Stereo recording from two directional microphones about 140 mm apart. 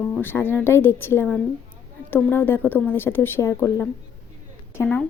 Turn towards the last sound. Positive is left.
turn(degrees=15)  # may be behind; listen again after turning